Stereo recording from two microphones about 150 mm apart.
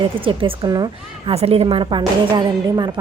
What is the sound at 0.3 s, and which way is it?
Speech, 35° right (ahead or behind).